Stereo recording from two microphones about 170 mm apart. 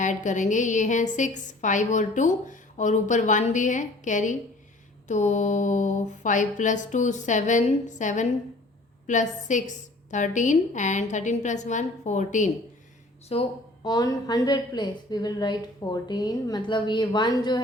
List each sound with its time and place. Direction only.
0.0 s a woman's voice: 45° left (ahead or behind)
13.2 s a woman's voice: 35° left (ahead or behind)